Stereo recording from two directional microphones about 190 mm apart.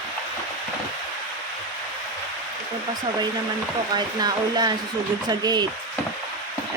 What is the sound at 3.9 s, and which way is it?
Speech, 20° right (ahead or behind).